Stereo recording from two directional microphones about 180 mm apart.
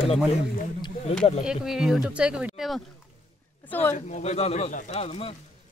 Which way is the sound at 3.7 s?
10° left (ahead or behind).